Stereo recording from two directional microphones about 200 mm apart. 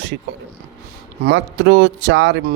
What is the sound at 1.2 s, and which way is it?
Speech, 60° right (ahead or behind).